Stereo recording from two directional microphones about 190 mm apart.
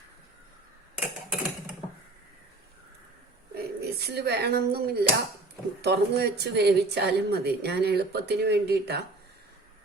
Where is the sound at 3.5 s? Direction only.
55° right (ahead or behind).